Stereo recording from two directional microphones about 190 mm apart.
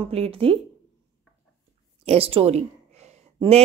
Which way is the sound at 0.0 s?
30° right (ahead or behind).